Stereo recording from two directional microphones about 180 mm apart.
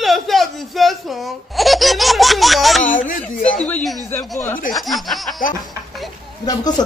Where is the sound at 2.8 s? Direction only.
50° left (ahead or behind).